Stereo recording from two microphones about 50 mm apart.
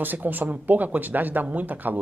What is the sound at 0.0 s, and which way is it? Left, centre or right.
Speech, right.